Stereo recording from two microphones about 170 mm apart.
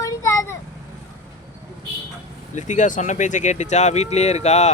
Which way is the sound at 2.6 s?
45° left (ahead or behind).